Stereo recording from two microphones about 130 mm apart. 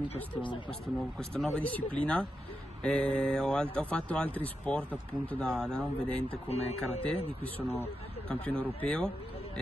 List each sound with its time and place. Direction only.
0.1 s speech: 40° left (ahead or behind)
1.3 s speech: 10° left (ahead or behind)
6.2 s speech: 55° left (ahead or behind)
7.6 s speech: 15° left (ahead or behind)